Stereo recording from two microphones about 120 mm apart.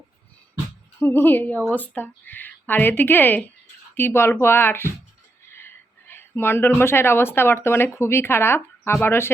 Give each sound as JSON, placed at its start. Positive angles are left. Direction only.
{"t": 0.9, "sound": "speech", "side_deg": 20}